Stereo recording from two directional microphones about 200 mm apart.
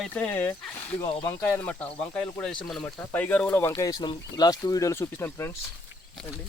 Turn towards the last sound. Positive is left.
turn(degrees=15)  # may be behind; listen again after turning